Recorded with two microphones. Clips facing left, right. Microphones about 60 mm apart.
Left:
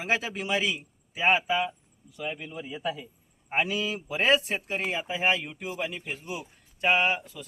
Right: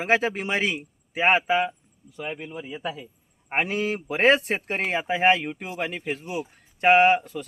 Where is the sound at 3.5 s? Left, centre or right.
Right.